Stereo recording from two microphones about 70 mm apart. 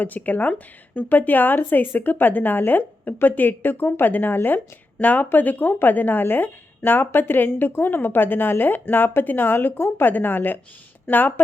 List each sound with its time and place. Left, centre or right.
0.0 s a woman's voice: left